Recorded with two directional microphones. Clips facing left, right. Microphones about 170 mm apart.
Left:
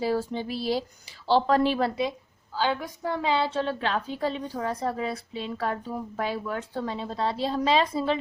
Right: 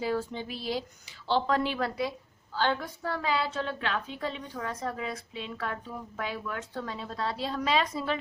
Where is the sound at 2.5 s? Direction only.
10° left (ahead or behind).